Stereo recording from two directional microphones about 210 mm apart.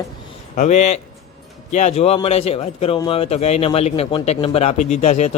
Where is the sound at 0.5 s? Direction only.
35° left (ahead or behind).